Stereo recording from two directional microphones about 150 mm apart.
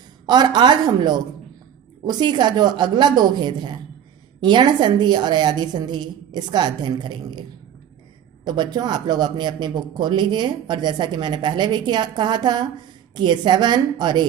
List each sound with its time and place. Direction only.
0.3 s speech: 30° right (ahead or behind)
8.4 s speech: 30° right (ahead or behind)